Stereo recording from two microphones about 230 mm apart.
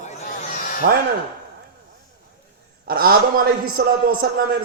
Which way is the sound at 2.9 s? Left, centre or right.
Right.